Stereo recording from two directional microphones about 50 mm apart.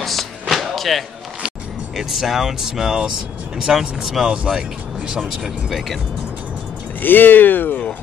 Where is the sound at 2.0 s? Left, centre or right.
Centre.